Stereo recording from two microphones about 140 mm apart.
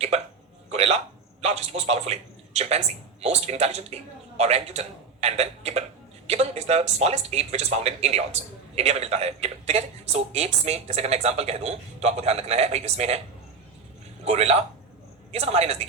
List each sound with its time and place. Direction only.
0.7 s a man's voice: 50° right (ahead or behind)
14.3 s speech: 50° right (ahead or behind)